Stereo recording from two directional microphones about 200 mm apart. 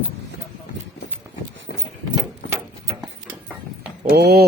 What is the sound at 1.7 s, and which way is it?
Clip-clop, 45° left (ahead or behind).